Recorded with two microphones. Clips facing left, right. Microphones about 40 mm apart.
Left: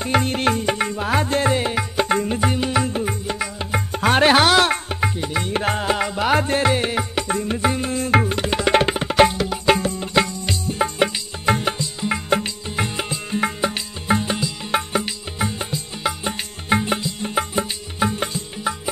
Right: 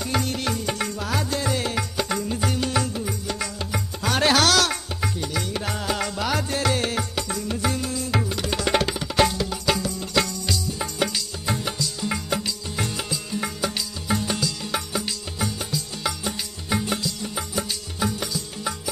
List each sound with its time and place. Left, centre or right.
0.0 s music: left
1.6 s music: left
2.0 s music: left
2.9 s music: left
3.3 s music: left
3.9 s music: left
5.9 s music: left
6.3 s music: left
6.7 s music: left
7.2 s tabla: left
10.1 s music: left
11.8 s music: left
12.3 s music: left